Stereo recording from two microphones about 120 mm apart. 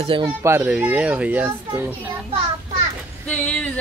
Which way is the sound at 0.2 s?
20° right (ahead or behind).